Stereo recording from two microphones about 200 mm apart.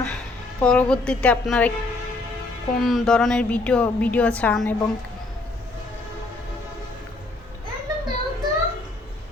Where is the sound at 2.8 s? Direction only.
Centre (ahead or behind).